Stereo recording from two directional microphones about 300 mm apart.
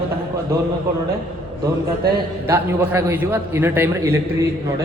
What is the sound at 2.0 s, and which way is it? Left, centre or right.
Speech, right.